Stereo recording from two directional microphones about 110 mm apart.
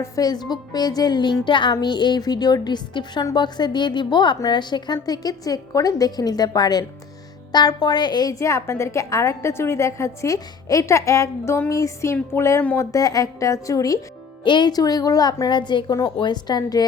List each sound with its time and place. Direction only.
0.0 s a woman's voice: 35° left (ahead or behind)
14.4 s a woman's voice: 45° left (ahead or behind)